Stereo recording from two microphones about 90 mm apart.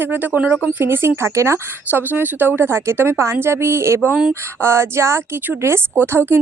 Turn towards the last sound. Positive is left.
turn(degrees=-25)  # may be behind; listen again after turning